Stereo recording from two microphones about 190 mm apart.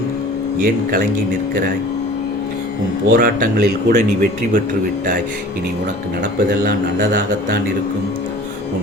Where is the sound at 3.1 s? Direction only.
50° right (ahead or behind).